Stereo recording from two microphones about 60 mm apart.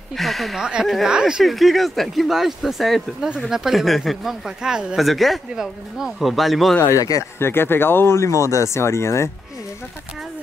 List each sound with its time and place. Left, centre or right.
0.1 s speech: centre
0.6 s speech: centre
1.4 s speech: centre
4.9 s speech: centre
7.0 s speech: left
7.3 s speech: left